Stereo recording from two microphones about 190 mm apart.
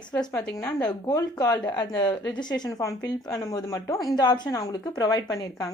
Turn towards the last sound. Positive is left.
turn(degrees=20)  # may be behind; listen again after turning